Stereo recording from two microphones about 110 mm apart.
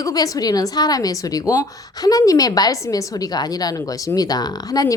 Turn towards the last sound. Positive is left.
turn(degrees=35)  # may be behind; listen again after turning